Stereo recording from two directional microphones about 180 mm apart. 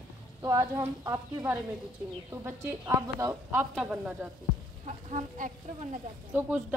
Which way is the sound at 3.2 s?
20° right (ahead or behind).